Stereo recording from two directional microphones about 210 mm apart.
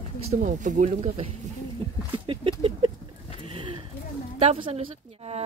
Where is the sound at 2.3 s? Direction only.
25° right (ahead or behind).